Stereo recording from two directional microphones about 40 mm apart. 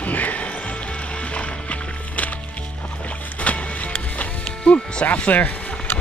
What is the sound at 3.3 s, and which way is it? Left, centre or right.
Music, left.